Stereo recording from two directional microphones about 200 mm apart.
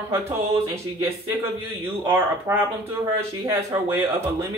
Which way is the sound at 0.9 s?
15° right (ahead or behind).